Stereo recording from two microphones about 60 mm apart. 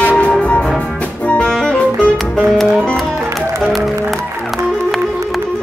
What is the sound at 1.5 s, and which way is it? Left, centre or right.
Music, centre.